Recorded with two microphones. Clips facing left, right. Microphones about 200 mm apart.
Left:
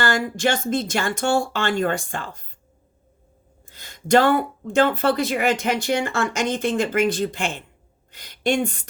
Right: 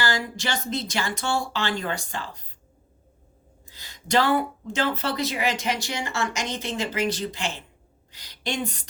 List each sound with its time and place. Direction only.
0.0 s speech: 50° left (ahead or behind)
3.7 s speech: 50° left (ahead or behind)